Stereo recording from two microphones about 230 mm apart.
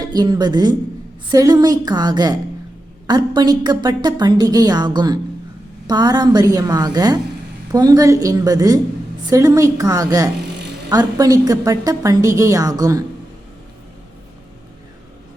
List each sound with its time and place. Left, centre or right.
0.0 s a woman's voice: centre